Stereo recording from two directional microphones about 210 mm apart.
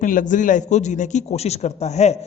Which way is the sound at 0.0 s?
40° left (ahead or behind).